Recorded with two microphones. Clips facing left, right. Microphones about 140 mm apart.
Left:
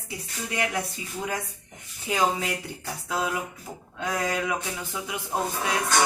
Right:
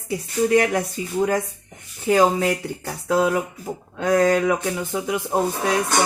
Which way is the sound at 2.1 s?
50° right (ahead or behind).